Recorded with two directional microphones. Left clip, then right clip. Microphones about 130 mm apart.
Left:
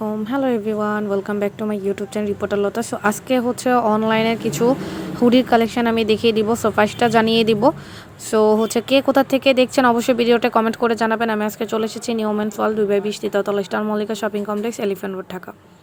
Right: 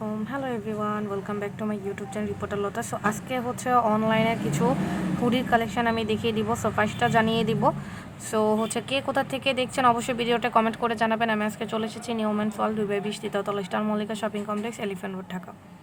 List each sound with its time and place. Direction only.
0.3 s speech: 50° left (ahead or behind)
3.6 s speech: 35° left (ahead or behind)
4.1 s speech: 50° left (ahead or behind)
6.5 s speech: 35° left (ahead or behind)
6.7 s speech: 45° left (ahead or behind)